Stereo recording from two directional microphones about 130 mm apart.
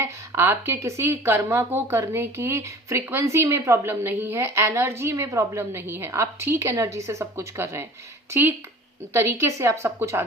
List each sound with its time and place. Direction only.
0.0 s speech: 20° right (ahead or behind)